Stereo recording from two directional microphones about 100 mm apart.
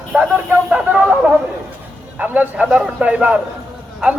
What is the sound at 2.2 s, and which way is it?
Speech, 15° right (ahead or behind).